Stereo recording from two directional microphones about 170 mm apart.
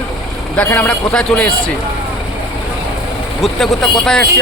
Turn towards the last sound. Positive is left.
turn(degrees=5)  # may be behind; listen again after turning